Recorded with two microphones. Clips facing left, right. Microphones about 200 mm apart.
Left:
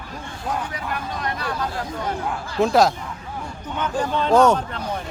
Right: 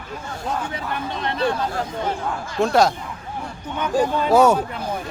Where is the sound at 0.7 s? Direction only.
25° right (ahead or behind).